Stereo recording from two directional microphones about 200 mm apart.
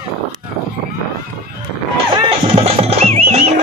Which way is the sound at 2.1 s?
25° right (ahead or behind).